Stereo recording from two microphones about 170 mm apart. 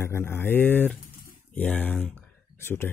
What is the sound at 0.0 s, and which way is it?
Speech, 15° left (ahead or behind).